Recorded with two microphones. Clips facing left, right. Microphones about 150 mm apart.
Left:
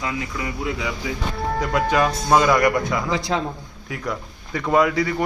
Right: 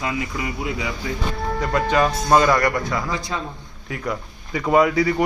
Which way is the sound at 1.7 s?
5° left (ahead or behind).